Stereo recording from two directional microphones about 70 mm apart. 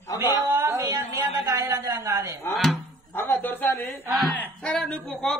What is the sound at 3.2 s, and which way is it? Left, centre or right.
Speech, left.